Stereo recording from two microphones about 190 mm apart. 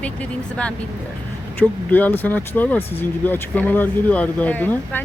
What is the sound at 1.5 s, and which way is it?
Speech, 10° left (ahead or behind).